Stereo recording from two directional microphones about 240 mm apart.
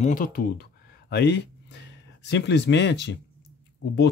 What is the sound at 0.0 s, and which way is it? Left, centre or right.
Speech, left.